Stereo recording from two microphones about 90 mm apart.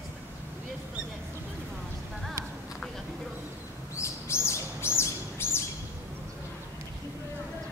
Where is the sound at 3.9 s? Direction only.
30° left (ahead or behind).